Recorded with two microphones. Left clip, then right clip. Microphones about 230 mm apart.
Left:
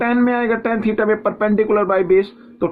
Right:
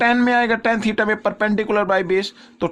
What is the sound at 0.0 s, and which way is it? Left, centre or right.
Speech, right.